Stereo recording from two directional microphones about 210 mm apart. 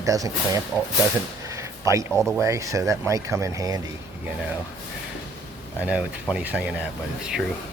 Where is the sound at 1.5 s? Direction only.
15° right (ahead or behind).